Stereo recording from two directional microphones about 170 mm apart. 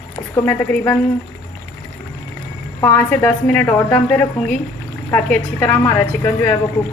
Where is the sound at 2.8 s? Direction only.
10° left (ahead or behind).